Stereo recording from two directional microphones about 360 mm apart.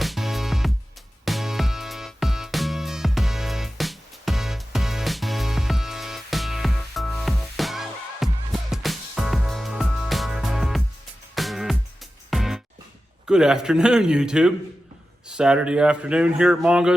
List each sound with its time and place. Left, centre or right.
0.0 s music: centre
13.2 s speech: centre